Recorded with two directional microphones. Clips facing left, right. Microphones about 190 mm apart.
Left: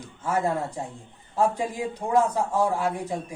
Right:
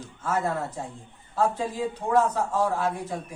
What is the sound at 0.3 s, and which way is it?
A man's voice, 15° left (ahead or behind).